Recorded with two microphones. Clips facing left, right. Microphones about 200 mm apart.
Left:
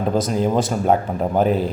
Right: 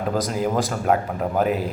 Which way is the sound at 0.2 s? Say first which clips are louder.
Left 3 dB; 20° left (ahead or behind).